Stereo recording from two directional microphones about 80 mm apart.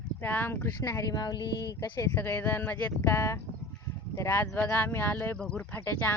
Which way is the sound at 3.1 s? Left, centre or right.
Left.